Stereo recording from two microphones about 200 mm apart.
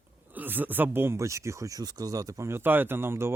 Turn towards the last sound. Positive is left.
turn(degrees=-10)  # may be behind; listen again after turning